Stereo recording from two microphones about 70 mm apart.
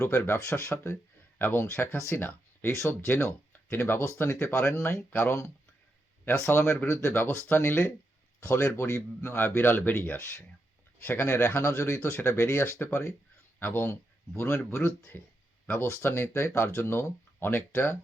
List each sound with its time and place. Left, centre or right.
0.0 s speech: left
6.5 s speech: left